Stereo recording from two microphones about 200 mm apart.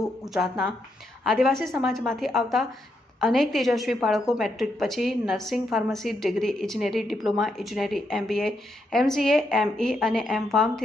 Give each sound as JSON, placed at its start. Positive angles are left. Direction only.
{"t": 0.3, "sound": "a woman's voice", "side_deg": -10}